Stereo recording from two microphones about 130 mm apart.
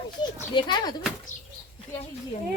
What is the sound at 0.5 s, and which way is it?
Speech, 35° left (ahead or behind).